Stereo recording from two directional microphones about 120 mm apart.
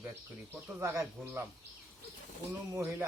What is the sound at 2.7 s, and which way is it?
Speech, 25° right (ahead or behind).